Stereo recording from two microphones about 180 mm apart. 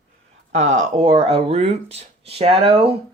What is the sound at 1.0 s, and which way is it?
Speech, 30° right (ahead or behind).